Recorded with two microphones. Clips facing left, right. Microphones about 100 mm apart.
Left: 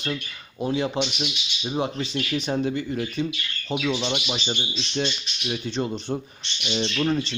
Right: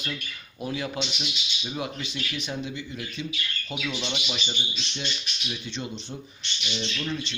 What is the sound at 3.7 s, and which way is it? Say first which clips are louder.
Speech: left 8 dB; 30° left (ahead or behind).